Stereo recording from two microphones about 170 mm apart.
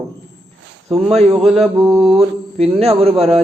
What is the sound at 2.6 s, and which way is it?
Speech, 35° right (ahead or behind).